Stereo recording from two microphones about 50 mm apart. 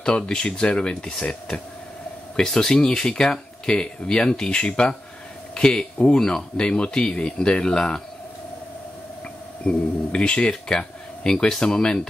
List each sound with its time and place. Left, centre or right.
0.0 s speech: centre
9.7 s speech: left